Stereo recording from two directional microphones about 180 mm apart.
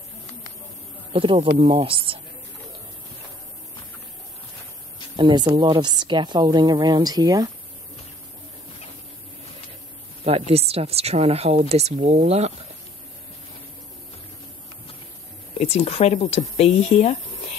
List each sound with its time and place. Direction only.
1.1 s a woman's voice: 30° right (ahead or behind)
5.1 s a woman's voice: 25° right (ahead or behind)
10.2 s speech: 35° right (ahead or behind)
15.6 s speech: 35° left (ahead or behind)